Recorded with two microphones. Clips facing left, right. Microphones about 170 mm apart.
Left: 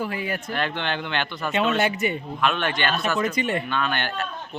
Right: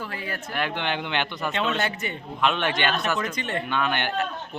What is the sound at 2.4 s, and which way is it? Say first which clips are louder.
Speech: right 1 dB; 20° right (ahead or behind).